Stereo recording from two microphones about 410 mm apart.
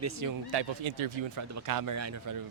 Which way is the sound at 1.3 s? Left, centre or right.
Right.